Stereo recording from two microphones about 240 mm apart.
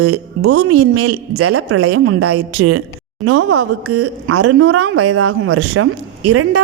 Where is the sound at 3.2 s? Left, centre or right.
Right.